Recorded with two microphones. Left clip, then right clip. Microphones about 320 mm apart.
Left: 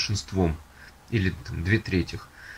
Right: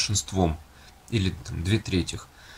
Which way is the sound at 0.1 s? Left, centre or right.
Centre.